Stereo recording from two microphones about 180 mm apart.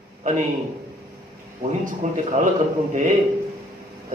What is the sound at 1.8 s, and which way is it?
Speech, 45° right (ahead or behind).